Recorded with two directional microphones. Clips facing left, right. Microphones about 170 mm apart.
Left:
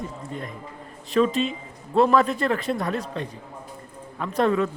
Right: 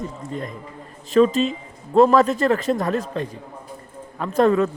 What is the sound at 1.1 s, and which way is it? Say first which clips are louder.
Speech: right 5 dB; 40° right (ahead or behind).